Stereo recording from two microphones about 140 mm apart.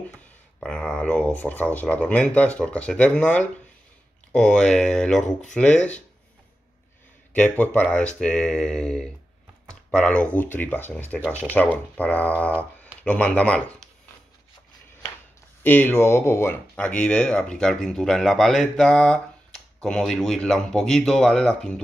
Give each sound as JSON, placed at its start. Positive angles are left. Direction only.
{"t": 0.6, "sound": "speech", "side_deg": 5}
{"t": 7.3, "sound": "speech", "side_deg": 10}
{"t": 11.2, "sound": "speech", "side_deg": -15}
{"t": 11.5, "sound": "speech", "side_deg": 10}
{"t": 15.6, "sound": "speech", "side_deg": 15}